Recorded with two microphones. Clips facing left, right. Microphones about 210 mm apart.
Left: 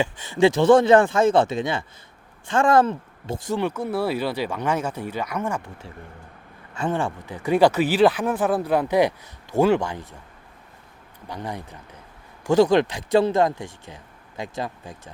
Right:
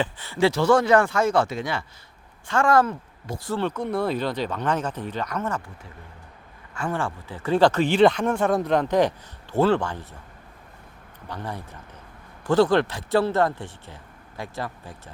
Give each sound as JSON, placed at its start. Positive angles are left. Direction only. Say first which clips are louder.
{"t": 0.0, "sound": "speech", "louder": "left 3 dB", "side_deg": 15}
{"t": 6.7, "sound": "speech", "louder": "left 3 dB", "side_deg": 20}
{"t": 11.3, "sound": "speech", "louder": "left 2 dB", "side_deg": 15}